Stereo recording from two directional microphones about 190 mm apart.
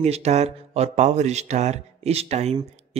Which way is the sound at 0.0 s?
35° right (ahead or behind).